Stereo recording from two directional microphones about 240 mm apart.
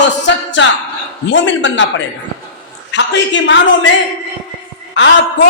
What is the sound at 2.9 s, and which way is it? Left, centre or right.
Speech, left.